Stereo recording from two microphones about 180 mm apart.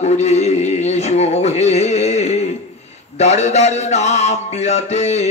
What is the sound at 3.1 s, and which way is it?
A man's voice, 40° left (ahead or behind).